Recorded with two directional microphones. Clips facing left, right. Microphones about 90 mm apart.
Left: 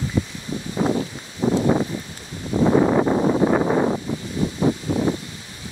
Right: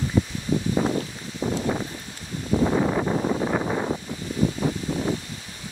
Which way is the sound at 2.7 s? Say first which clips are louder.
Left 6 dB; 45° left (ahead or behind).